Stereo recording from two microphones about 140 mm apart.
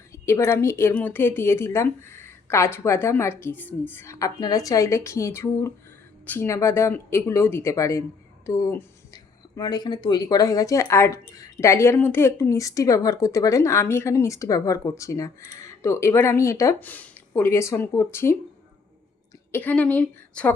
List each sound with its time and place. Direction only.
0.1 s speech: 20° left (ahead or behind)
19.5 s a woman's voice: 15° left (ahead or behind)